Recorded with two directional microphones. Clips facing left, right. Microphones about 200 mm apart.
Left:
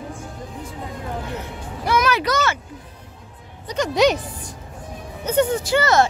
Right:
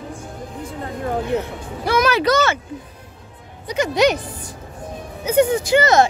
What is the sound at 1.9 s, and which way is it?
Speech, 30° right (ahead or behind).